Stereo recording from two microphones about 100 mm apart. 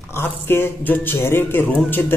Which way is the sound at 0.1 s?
25° left (ahead or behind).